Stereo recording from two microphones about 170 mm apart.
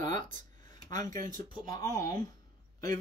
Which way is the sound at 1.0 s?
50° right (ahead or behind).